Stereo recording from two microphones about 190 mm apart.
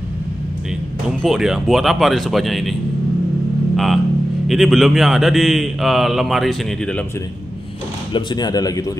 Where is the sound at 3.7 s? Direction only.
Centre (ahead or behind).